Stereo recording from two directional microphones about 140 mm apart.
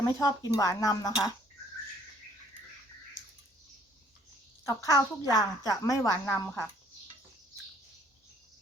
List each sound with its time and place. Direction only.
0.0 s a woman's voice: 25° left (ahead or behind)
4.6 s a woman's voice: 25° left (ahead or behind)